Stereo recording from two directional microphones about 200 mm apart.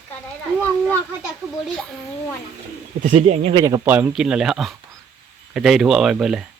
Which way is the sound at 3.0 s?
40° right (ahead or behind).